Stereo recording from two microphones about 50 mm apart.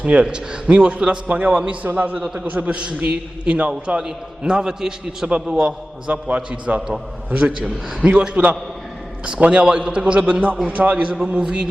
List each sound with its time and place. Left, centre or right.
0.0 s a man's voice: right
2.2 s a man's voice: centre
2.5 s a man's voice: right
6.1 s a man's voice: right